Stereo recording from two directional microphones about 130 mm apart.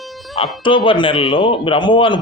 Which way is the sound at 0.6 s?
40° left (ahead or behind).